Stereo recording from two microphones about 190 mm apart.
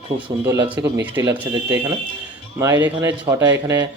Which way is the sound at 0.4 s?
20° right (ahead or behind).